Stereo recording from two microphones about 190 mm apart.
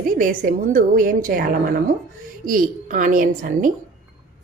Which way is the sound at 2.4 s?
45° right (ahead or behind).